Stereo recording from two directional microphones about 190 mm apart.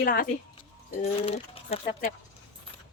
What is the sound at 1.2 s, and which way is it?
Speech, 30° left (ahead or behind).